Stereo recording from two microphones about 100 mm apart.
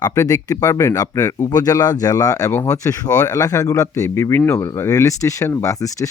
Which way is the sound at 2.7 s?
35° left (ahead or behind).